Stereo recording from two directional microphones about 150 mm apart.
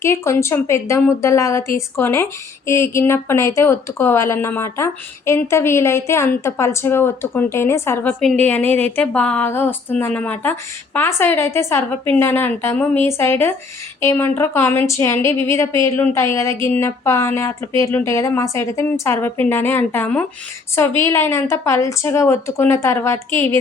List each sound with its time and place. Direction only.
0.0 s a woman's voice: 20° left (ahead or behind)